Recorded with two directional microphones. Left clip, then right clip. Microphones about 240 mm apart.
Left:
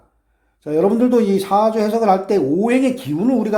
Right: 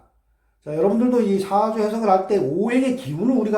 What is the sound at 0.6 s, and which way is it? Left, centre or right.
Speech, left.